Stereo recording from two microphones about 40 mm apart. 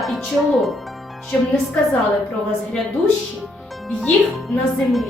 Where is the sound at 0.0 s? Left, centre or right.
Centre.